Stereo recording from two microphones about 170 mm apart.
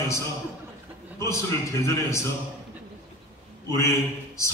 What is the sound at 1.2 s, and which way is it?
A man's voice, 15° left (ahead or behind).